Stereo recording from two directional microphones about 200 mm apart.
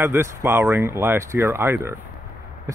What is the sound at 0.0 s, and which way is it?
Speech, 10° right (ahead or behind).